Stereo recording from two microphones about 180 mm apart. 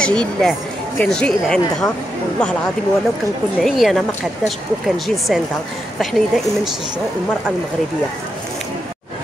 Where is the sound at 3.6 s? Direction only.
Centre (ahead or behind).